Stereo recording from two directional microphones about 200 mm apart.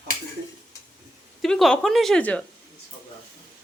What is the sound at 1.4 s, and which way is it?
Speech, 5° left (ahead or behind).